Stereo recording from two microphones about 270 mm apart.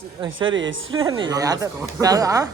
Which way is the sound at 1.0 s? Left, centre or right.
Centre.